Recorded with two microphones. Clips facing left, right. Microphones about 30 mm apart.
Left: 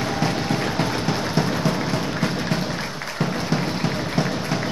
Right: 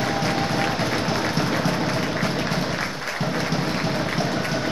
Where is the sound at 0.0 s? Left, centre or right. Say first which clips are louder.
Right 1 dB; centre.